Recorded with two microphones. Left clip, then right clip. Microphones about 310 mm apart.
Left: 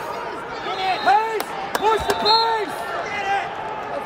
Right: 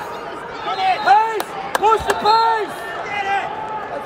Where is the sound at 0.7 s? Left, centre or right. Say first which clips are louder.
Right 4 dB; right.